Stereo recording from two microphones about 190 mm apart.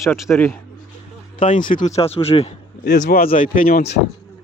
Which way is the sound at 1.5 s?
45° left (ahead or behind).